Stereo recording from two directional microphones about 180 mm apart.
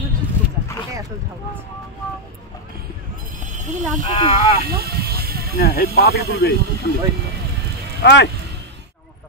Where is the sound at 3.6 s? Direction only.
40° right (ahead or behind).